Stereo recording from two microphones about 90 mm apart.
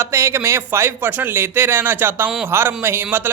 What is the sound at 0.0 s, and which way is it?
A man's voice, 30° right (ahead or behind).